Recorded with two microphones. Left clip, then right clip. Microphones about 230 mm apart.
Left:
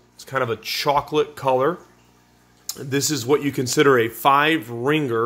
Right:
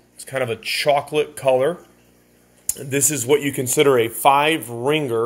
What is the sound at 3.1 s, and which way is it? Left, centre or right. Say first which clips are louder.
Speech: right 2 dB; centre.